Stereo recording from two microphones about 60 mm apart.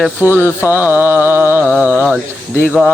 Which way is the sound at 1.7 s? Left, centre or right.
Right.